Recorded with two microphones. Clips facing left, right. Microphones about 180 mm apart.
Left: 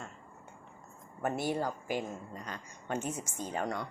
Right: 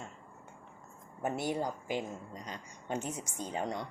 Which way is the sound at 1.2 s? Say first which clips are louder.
Left 1 dB; 15° right (ahead or behind).